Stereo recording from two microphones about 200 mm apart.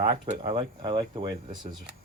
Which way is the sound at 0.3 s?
25° right (ahead or behind).